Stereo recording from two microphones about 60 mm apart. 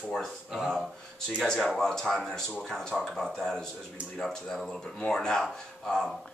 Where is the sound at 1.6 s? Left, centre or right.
Centre.